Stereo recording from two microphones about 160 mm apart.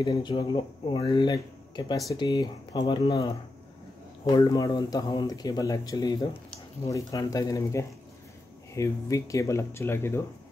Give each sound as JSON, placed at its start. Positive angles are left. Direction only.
{"t": 0.0, "sound": "speech", "side_deg": 30}
{"t": 4.4, "sound": "speech", "side_deg": 20}